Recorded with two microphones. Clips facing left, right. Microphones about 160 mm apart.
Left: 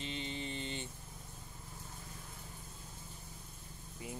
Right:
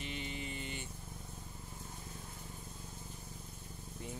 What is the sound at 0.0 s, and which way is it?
Mantra, 25° left (ahead or behind).